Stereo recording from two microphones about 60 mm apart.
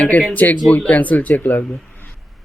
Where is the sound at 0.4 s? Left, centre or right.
Left.